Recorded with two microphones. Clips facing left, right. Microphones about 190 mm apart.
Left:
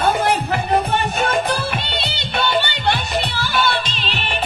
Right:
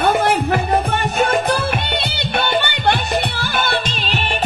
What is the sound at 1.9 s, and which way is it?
Music, 55° right (ahead or behind).